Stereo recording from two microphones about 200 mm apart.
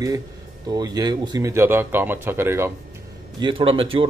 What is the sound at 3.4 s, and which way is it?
Speech, 25° right (ahead or behind).